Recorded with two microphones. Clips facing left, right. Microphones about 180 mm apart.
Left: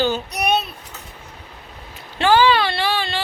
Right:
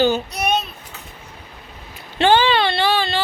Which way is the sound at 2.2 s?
25° right (ahead or behind).